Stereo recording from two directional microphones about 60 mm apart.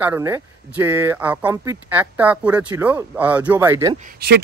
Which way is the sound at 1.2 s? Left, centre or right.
Right.